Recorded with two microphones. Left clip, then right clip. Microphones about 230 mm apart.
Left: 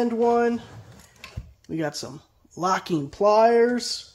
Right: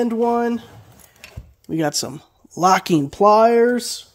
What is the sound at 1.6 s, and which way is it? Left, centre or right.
Speech, right.